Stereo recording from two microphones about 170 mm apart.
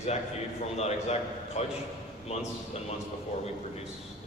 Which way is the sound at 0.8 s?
40° left (ahead or behind).